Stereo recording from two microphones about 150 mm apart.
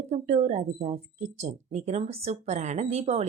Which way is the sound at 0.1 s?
45° right (ahead or behind).